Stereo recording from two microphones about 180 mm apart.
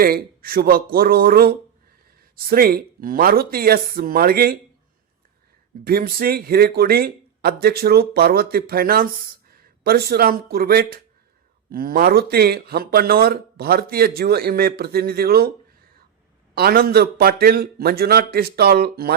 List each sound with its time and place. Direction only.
0.0 s speech: 55° right (ahead or behind)
5.8 s speech: 55° right (ahead or behind)
16.6 s speech: 60° right (ahead or behind)